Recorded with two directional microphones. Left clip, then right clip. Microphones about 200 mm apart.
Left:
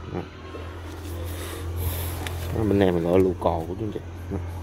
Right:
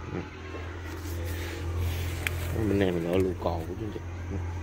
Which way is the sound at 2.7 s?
20° left (ahead or behind).